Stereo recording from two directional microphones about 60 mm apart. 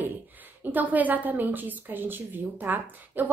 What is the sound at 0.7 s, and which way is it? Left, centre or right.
A woman's voice, right.